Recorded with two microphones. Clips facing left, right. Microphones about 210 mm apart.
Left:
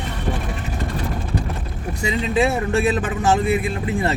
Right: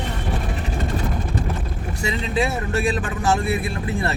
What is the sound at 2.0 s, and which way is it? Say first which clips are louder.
Speech: left 4 dB; 20° left (ahead or behind).